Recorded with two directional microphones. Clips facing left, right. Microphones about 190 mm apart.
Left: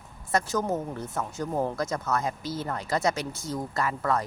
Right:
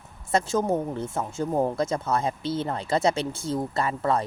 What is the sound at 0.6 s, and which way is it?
Speech, 15° right (ahead or behind).